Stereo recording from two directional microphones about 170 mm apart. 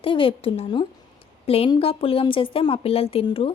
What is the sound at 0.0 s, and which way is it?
A woman's voice, 30° left (ahead or behind).